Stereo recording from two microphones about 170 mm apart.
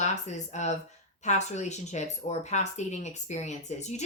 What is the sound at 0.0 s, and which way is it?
A woman's voice, 45° left (ahead or behind).